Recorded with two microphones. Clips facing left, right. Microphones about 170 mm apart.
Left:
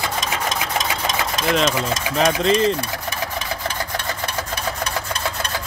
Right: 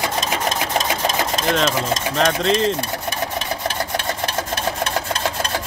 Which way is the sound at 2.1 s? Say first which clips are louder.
Left 2 dB; centre (ahead or behind).